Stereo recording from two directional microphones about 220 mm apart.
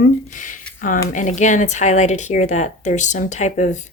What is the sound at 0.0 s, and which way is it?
Speech, 35° left (ahead or behind).